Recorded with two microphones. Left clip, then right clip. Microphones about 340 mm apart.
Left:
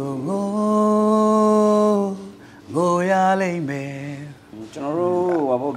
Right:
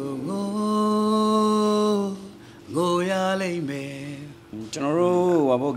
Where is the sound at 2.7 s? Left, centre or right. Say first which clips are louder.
Left 5 dB; centre.